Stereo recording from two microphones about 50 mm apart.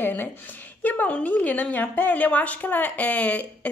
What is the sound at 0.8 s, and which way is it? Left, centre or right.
A woman's voice, left.